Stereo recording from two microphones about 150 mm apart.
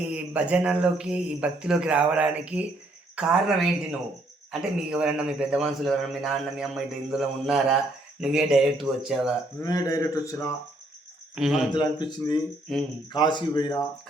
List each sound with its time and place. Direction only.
0.1 s a man's voice: 10° right (ahead or behind)
4.8 s a man's voice: 5° right (ahead or behind)
9.6 s speech: 25° left (ahead or behind)
11.3 s a man's voice: 5° right (ahead or behind)
11.7 s speech: 30° left (ahead or behind)
12.7 s a man's voice: centre (ahead or behind)
13.1 s speech: 30° left (ahead or behind)